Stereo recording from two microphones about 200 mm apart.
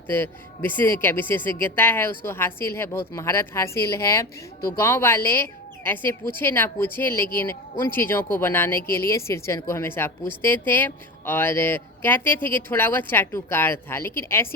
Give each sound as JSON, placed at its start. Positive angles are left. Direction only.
{"t": 0.1, "sound": "speech", "side_deg": 10}